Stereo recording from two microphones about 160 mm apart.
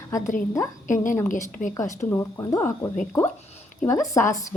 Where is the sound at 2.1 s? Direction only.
20° left (ahead or behind).